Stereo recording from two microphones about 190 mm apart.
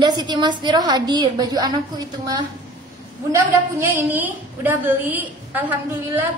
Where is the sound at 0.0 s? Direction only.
20° right (ahead or behind).